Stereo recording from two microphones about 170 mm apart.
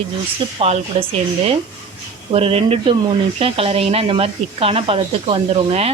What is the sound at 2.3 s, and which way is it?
Speech, 35° right (ahead or behind).